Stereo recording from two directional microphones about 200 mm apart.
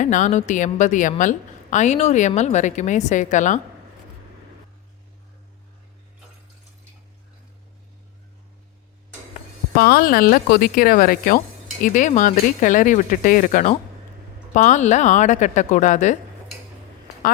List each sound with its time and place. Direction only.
0.0 s a woman's voice: 40° left (ahead or behind)
9.7 s a woman's voice: 50° left (ahead or behind)